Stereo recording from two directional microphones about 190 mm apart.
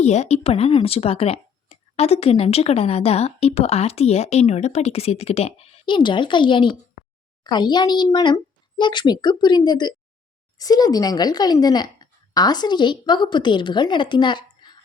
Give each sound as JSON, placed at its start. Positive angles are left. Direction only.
{"t": 0.0, "sound": "a woman's voice", "side_deg": 35}